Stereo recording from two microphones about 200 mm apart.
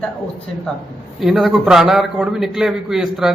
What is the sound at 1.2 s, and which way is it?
A man's voice, centre (ahead or behind).